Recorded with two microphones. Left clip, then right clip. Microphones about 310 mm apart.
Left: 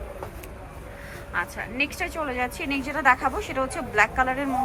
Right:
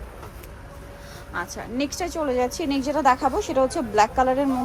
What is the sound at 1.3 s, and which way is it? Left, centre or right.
A woman's voice, centre.